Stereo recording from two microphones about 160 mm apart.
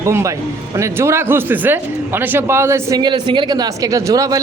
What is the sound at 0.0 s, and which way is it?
Speech, 20° right (ahead or behind).